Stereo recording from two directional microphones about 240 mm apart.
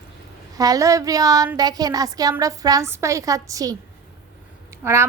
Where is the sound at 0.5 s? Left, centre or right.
Centre.